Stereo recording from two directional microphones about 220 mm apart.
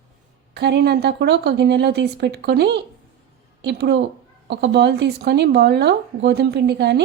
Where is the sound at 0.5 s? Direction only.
50° right (ahead or behind).